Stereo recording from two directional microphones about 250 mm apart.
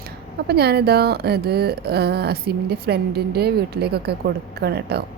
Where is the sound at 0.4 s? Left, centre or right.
Right.